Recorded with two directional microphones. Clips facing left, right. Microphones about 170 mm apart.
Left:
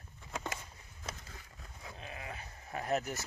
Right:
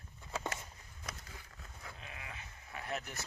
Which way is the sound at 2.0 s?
30° left (ahead or behind).